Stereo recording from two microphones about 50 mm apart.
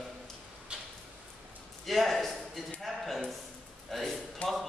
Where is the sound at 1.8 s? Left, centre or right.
Centre.